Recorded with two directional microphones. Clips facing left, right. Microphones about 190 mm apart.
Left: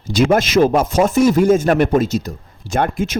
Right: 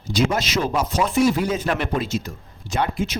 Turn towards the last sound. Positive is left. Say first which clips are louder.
# left 5 dB
turn(degrees=50)  # may be behind; listen again after turning